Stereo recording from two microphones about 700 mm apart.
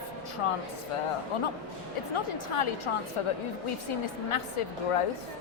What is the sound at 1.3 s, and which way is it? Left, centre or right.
Speech, left.